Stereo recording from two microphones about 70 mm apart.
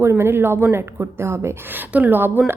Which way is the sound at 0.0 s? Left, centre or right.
Right.